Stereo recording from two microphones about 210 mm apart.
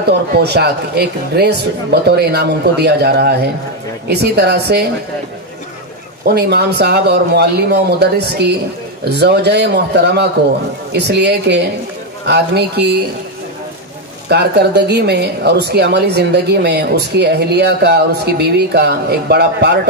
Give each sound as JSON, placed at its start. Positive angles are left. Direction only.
{"t": 0.4, "sound": "a woman's voice", "side_deg": -50}
{"t": 6.2, "sound": "a woman's voice", "side_deg": -50}
{"t": 14.3, "sound": "a woman's voice", "side_deg": -50}